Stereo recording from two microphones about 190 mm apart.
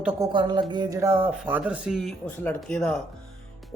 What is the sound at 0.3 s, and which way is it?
Speech, 25° right (ahead or behind).